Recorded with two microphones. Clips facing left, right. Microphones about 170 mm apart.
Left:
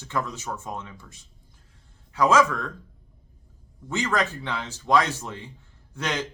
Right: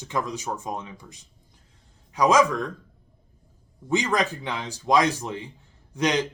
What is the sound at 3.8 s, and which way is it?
Speech, 15° right (ahead or behind).